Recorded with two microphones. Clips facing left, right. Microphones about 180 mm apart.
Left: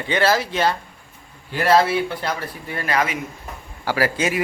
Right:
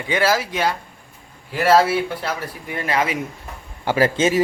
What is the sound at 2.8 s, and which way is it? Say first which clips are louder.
Speech: right 1 dB; 25° right (ahead or behind).